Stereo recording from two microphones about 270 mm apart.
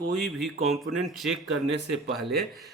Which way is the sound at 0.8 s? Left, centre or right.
Right.